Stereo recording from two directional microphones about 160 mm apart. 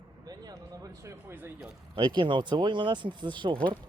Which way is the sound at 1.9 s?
30° right (ahead or behind).